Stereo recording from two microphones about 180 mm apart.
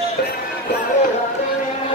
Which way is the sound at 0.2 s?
60° left (ahead or behind).